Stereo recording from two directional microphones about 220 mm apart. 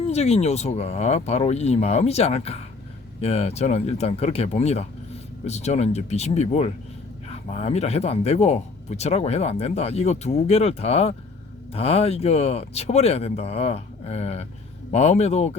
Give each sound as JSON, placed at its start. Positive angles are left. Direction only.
{"t": 0.1, "sound": "speech", "side_deg": 30}